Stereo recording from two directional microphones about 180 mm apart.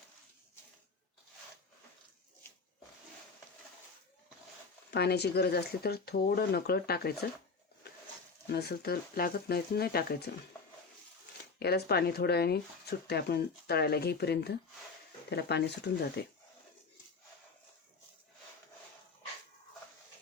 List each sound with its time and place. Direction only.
4.9 s speech: 65° left (ahead or behind)
8.4 s speech: 65° left (ahead or behind)
11.6 s speech: 65° left (ahead or behind)